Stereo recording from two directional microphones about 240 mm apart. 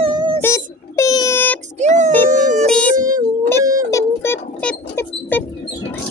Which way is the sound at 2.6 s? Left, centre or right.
Centre.